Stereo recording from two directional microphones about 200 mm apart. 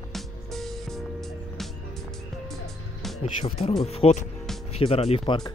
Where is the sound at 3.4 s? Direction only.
30° left (ahead or behind).